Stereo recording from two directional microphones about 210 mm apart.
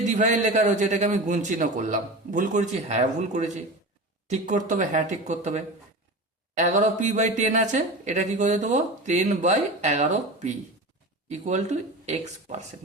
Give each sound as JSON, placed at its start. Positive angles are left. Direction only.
{"t": 0.0, "sound": "speech", "side_deg": -35}